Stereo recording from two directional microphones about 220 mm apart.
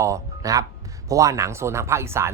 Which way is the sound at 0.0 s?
15° right (ahead or behind).